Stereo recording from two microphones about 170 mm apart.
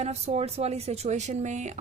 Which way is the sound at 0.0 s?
40° right (ahead or behind).